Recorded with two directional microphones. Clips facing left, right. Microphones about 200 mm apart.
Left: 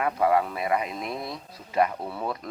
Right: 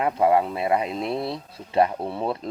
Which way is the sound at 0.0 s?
25° right (ahead or behind).